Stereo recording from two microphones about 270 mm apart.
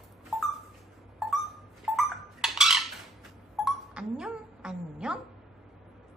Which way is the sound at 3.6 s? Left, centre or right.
Centre.